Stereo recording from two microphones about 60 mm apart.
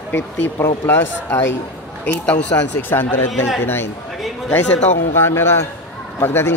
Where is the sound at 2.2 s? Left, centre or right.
Left.